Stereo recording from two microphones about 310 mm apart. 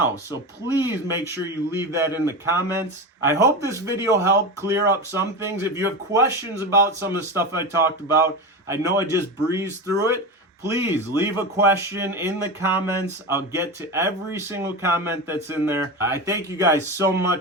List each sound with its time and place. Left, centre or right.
0.3 s speech: centre